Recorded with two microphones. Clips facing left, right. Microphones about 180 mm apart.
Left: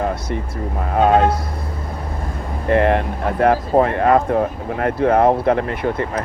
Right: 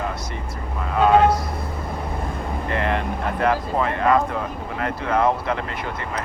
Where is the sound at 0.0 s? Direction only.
55° left (ahead or behind).